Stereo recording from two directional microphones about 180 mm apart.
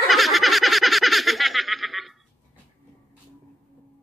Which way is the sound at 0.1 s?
Centre (ahead or behind).